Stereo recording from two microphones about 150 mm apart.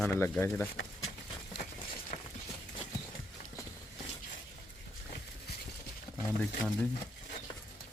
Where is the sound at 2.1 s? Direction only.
60° left (ahead or behind).